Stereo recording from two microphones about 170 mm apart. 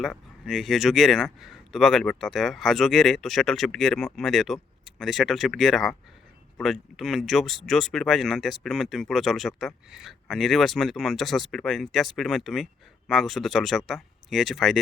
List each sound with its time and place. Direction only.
0.0 s speech: centre (ahead or behind)